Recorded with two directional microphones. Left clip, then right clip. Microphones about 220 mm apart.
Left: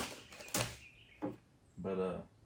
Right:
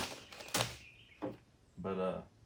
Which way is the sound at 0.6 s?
15° right (ahead or behind).